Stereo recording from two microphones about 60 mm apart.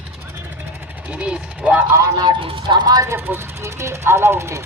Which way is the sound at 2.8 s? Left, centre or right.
Right.